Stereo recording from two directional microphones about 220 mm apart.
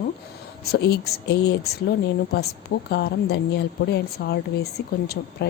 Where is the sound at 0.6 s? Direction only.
50° left (ahead or behind).